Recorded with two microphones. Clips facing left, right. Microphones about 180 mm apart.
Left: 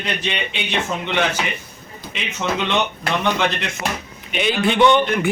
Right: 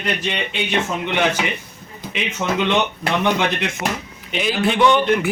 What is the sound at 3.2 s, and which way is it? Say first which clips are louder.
Speech: right 1 dB; 15° right (ahead or behind).